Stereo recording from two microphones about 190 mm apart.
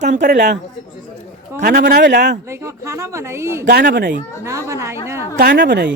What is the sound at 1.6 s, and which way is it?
Speech, 55° right (ahead or behind).